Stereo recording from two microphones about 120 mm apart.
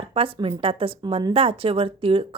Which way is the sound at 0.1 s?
50° right (ahead or behind).